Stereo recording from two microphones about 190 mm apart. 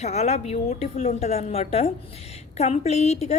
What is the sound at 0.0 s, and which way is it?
A woman's voice, 35° left (ahead or behind).